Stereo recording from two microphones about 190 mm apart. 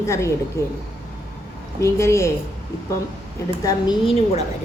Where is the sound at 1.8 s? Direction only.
15° left (ahead or behind).